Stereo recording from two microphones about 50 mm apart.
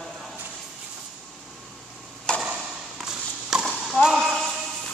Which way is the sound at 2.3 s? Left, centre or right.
Centre.